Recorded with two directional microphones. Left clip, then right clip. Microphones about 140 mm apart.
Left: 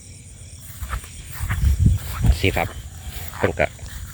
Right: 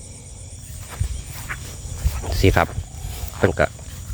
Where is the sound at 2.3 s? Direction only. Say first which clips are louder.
Right 4 dB; 55° right (ahead or behind).